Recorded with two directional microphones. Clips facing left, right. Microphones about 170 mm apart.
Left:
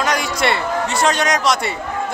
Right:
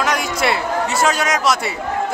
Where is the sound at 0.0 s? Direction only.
Centre (ahead or behind).